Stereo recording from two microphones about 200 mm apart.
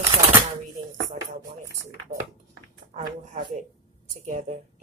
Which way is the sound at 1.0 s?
40° right (ahead or behind).